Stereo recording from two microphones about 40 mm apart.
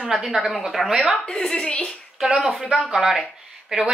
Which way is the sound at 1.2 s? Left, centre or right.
Centre.